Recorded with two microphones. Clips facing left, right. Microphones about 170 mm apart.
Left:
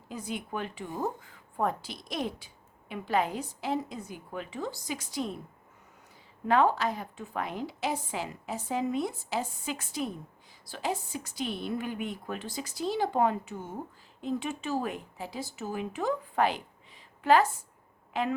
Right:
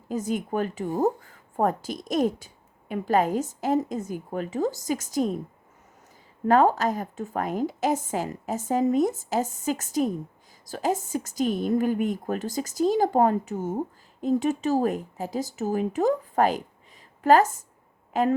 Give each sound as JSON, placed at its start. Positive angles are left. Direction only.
{"t": 0.1, "sound": "a woman's voice", "side_deg": -45}
{"t": 6.5, "sound": "a woman's voice", "side_deg": -45}